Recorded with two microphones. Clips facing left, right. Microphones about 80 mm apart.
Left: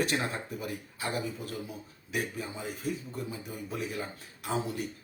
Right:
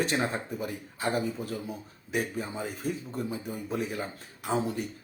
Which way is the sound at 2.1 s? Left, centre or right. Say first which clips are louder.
Right 3 dB; right.